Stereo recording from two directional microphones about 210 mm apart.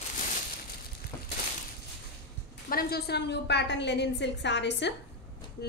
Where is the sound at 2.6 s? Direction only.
45° left (ahead or behind).